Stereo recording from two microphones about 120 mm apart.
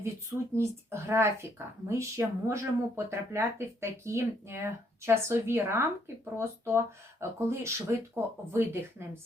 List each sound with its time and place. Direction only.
0.5 s speech: 20° right (ahead or behind)